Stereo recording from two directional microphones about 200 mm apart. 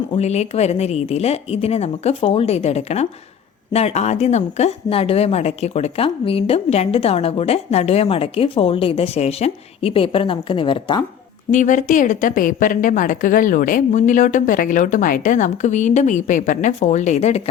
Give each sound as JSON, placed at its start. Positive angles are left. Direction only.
{"t": 0.2, "sound": "a woman's voice", "side_deg": 35}
{"t": 11.5, "sound": "a woman's voice", "side_deg": 40}